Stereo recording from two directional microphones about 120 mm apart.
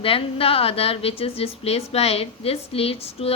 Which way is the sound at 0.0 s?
50° left (ahead or behind).